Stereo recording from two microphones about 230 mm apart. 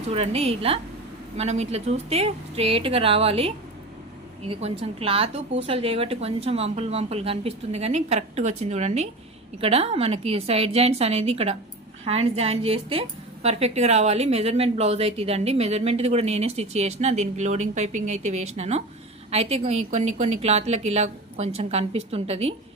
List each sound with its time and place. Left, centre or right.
0.1 s a woman's voice: right